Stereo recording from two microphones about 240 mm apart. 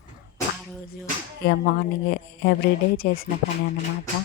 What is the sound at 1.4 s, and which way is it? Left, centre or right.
Speech, left.